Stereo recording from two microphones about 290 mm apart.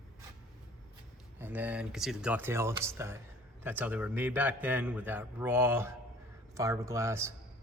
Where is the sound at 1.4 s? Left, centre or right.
Centre.